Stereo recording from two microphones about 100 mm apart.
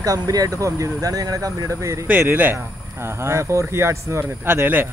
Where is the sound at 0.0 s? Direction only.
40° right (ahead or behind).